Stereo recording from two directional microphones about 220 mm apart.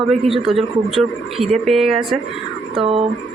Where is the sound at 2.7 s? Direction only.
25° right (ahead or behind).